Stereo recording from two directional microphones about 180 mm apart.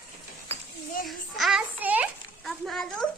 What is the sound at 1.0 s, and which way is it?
A child's voice, centre (ahead or behind).